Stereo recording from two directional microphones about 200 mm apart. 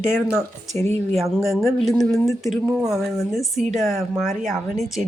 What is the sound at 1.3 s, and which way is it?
Speech, centre (ahead or behind).